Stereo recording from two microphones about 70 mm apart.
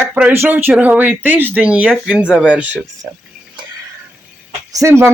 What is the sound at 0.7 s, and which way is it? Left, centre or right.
Speech, right.